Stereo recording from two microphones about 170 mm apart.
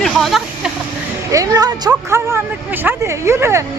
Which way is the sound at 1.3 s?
20° right (ahead or behind).